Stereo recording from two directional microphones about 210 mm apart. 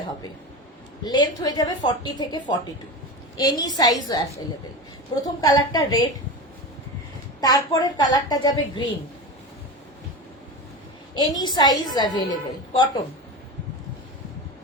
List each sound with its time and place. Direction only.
1.0 s a woman's voice: 20° left (ahead or behind)
5.4 s a woman's voice: 20° left (ahead or behind)
7.4 s a woman's voice: 20° left (ahead or behind)
11.3 s a woman's voice: 20° left (ahead or behind)